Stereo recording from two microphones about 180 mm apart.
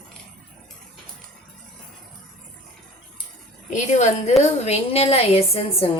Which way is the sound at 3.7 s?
40° left (ahead or behind).